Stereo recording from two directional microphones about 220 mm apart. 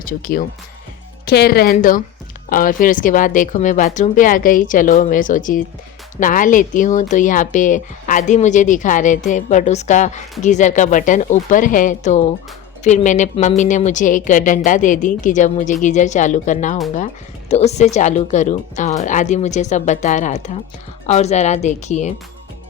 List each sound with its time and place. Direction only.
0.0 s speech: 40° left (ahead or behind)